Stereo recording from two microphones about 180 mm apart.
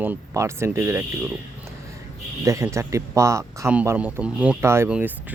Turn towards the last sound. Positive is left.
turn(degrees=-10)  # may be behind; listen again after turning